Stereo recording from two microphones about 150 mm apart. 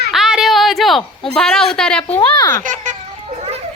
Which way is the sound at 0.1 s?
Centre (ahead or behind).